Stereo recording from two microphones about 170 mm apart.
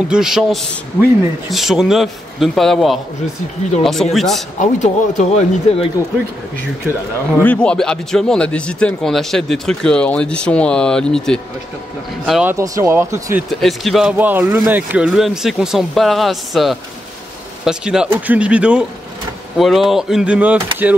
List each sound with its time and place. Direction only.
0.1 s speech: 5° right (ahead or behind)
4.6 s speech: 45° left (ahead or behind)
7.3 s speech: 10° left (ahead or behind)
12.5 s speech: 20° right (ahead or behind)
13.5 s speech: centre (ahead or behind)